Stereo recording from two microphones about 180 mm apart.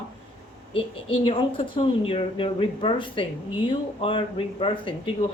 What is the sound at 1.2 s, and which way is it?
Speech, 30° left (ahead or behind).